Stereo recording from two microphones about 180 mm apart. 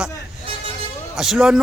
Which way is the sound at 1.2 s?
Centre (ahead or behind).